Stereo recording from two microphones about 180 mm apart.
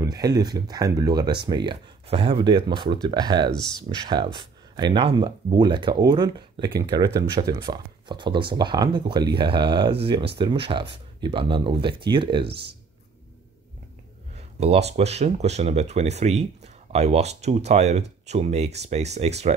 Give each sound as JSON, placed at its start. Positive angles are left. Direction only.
{"t": 0.0, "sound": "speech", "side_deg": -20}
{"t": 1.7, "sound": "speech", "side_deg": -30}
{"t": 12.4, "sound": "speech", "side_deg": -65}
{"t": 14.6, "sound": "speech", "side_deg": -35}